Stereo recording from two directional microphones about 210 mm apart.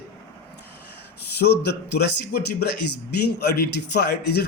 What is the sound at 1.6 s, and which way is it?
Speech, 50° left (ahead or behind).